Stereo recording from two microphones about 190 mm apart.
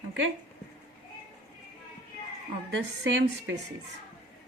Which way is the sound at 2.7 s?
70° right (ahead or behind).